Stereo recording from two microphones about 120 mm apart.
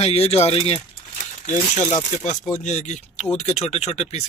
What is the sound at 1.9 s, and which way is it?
Speech, 80° left.